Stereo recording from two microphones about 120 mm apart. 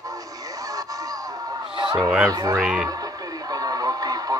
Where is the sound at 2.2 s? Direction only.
30° right (ahead or behind).